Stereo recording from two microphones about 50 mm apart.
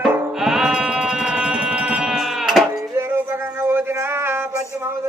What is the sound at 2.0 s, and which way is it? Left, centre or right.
Sheep, centre.